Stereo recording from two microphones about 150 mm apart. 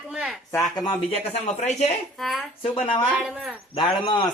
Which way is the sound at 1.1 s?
45° left (ahead or behind).